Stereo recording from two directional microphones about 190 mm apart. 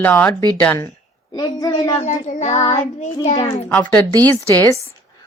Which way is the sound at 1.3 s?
20° left (ahead or behind).